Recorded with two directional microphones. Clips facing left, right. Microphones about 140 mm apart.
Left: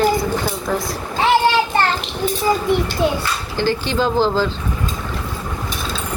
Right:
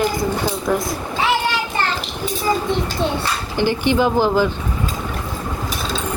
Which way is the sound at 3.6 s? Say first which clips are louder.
Right 2 dB; 15° right (ahead or behind).